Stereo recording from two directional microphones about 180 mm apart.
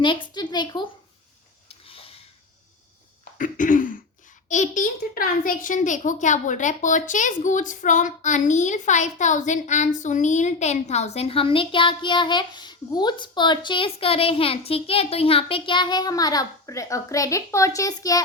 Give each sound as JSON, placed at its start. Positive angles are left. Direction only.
{"t": 0.0, "sound": "a child's voice", "side_deg": 25}
{"t": 1.6, "sound": "a sound", "side_deg": 30}
{"t": 3.3, "sound": "throat clearing", "side_deg": 50}
{"t": 4.4, "sound": "a child's voice", "side_deg": 45}